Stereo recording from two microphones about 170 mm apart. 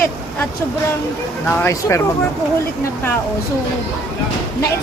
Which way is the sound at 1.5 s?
15° left (ahead or behind).